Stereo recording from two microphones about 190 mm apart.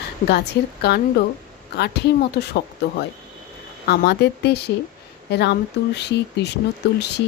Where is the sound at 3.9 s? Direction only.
60° left (ahead or behind).